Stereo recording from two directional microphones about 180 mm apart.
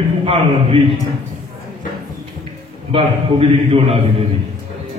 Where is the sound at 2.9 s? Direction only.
30° right (ahead or behind).